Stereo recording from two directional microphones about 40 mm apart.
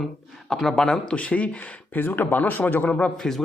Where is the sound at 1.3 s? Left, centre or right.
Left.